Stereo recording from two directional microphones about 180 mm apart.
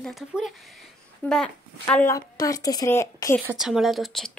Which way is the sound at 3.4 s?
5° right (ahead or behind).